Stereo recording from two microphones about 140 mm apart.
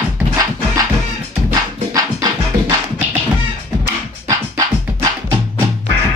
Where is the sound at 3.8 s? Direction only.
25° right (ahead or behind).